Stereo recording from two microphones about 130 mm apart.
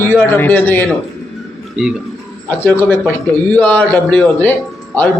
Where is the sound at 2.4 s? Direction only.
15° left (ahead or behind).